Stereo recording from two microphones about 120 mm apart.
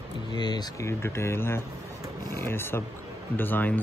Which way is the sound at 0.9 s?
20° left (ahead or behind).